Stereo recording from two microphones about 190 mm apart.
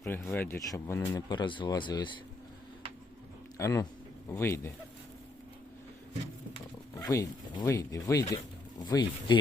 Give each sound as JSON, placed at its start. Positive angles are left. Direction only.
{"t": 0.0, "sound": "speech", "side_deg": 10}
{"t": 3.6, "sound": "speech", "side_deg": 15}
{"t": 7.0, "sound": "speech", "side_deg": 15}